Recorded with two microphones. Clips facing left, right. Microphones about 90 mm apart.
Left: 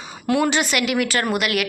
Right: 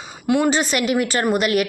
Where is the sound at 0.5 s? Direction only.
35° right (ahead or behind).